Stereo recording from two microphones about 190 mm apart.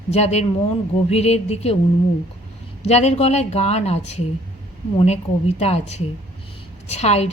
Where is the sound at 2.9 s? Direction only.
35° left (ahead or behind).